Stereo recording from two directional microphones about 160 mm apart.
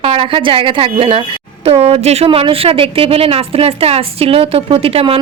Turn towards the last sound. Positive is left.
turn(degrees=-35)  # may be behind; listen again after turning